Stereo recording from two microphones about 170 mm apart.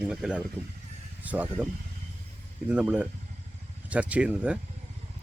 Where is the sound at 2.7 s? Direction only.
5° right (ahead or behind).